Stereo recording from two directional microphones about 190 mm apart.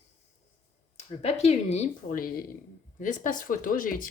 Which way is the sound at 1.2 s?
35° left (ahead or behind).